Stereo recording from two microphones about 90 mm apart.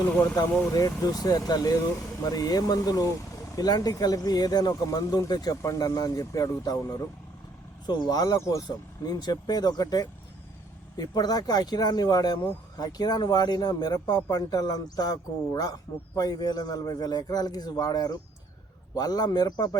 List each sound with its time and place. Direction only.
0.7 s speech: 40° left (ahead or behind)